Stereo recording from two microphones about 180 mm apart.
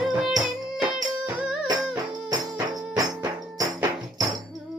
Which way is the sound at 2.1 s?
20° right (ahead or behind).